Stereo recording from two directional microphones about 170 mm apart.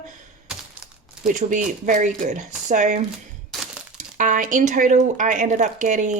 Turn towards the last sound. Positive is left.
turn(degrees=-45)  # may be behind; listen again after turning